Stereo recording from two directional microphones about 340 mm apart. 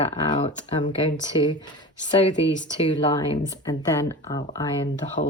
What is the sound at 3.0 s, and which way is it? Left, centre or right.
Speech, centre.